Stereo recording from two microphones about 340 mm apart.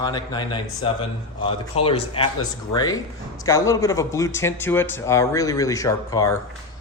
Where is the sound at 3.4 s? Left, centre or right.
Centre.